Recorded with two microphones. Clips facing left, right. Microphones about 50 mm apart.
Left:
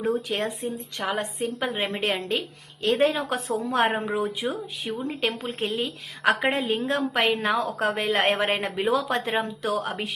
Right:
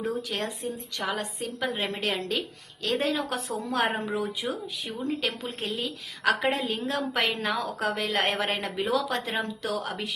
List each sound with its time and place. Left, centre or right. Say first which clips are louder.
0.0 s a woman's voice: left 4 dB; left